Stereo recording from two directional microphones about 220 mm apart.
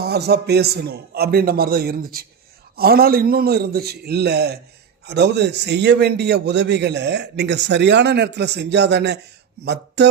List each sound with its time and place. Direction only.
0.0 s a man's voice: 45° right (ahead or behind)